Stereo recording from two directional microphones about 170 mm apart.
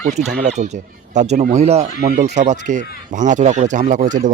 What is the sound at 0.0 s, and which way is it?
Speech, 40° right (ahead or behind).